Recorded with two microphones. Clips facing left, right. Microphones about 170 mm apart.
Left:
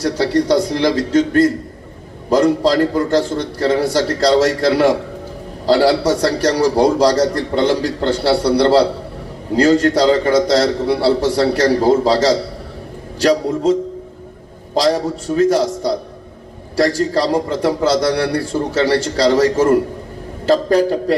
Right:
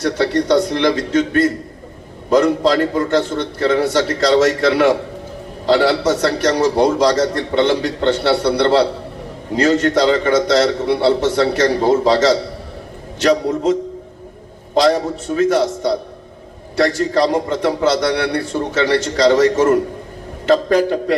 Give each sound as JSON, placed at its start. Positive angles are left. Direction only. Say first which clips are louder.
{"t": 0.0, "sound": "a man's voice", "louder": "left 1 dB", "side_deg": 35}
{"t": 15.4, "sound": "a man's voice", "louder": "left 1 dB", "side_deg": 35}